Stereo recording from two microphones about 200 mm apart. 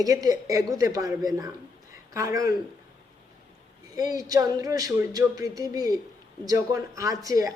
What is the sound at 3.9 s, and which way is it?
Speech, 20° right (ahead or behind).